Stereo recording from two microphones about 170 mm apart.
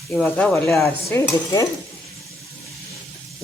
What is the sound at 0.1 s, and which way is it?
Speech, 5° left (ahead or behind).